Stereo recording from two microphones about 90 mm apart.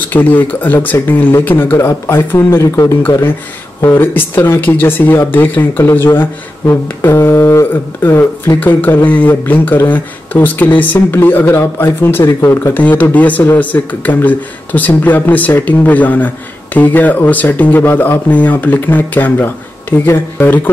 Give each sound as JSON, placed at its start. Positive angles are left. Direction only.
{"t": 0.1, "sound": "speech", "side_deg": 20}
{"t": 12.7, "sound": "speech", "side_deg": 20}